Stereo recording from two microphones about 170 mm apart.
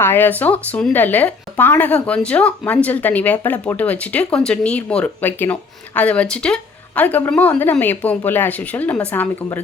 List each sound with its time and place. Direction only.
0.0 s speech: 10° left (ahead or behind)